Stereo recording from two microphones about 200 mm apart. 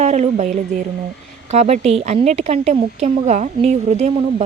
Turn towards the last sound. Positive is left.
turn(degrees=-30)  # may be behind; listen again after turning